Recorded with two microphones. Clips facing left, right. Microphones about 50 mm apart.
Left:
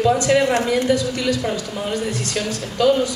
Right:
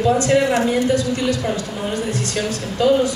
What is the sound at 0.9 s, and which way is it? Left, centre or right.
A woman's voice, right.